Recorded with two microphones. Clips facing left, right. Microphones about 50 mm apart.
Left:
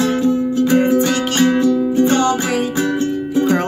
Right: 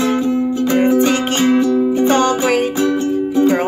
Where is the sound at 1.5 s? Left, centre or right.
Centre.